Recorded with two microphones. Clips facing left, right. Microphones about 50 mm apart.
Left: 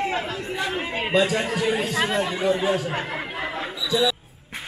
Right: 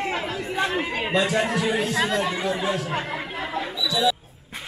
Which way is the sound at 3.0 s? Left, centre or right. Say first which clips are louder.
Even; centre.